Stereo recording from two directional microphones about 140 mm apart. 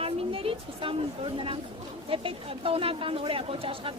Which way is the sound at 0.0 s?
40° right (ahead or behind).